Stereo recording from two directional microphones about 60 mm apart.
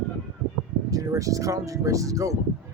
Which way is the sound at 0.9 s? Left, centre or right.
Right.